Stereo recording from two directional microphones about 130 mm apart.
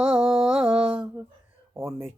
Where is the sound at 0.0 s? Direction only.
5° right (ahead or behind).